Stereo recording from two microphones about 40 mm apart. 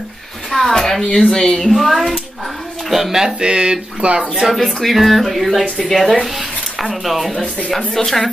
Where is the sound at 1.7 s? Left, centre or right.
Centre; by 4.3 s right.